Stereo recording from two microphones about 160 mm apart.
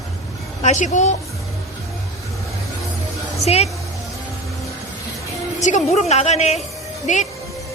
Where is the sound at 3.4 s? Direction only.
40° left (ahead or behind).